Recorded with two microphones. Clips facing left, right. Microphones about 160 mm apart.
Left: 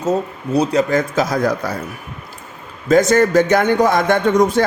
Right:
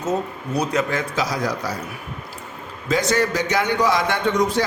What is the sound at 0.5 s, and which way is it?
A man's voice, 30° left (ahead or behind).